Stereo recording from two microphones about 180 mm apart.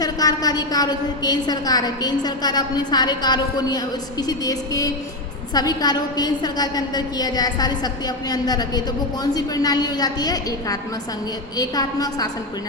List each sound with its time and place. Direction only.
0.0 s a woman's voice: 20° left (ahead or behind)